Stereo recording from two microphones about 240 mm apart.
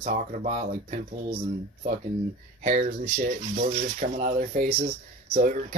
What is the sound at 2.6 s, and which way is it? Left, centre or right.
Speech, right.